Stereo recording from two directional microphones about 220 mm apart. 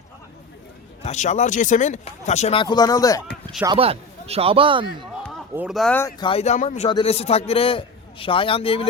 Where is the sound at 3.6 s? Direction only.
25° right (ahead or behind).